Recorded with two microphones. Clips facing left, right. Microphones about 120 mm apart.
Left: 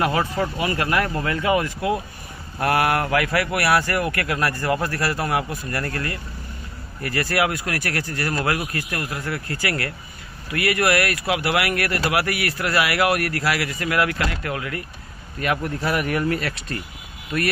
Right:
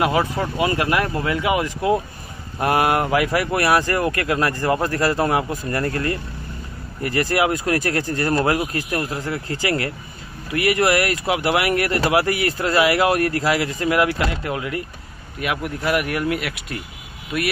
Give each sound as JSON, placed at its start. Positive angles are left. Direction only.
{"t": 0.0, "sound": "speech", "side_deg": -15}
{"t": 15.4, "sound": "speech", "side_deg": -10}